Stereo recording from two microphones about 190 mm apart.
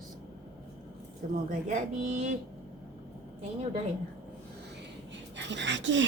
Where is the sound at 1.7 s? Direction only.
40° right (ahead or behind).